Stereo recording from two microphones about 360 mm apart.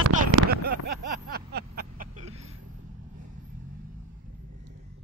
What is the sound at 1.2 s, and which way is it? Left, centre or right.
Vehicle, right.